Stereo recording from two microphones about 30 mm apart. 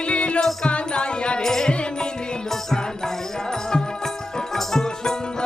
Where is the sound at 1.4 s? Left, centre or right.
Centre.